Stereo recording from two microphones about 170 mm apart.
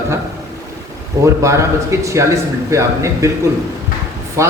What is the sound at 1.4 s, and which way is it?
A man's voice, 15° right (ahead or behind).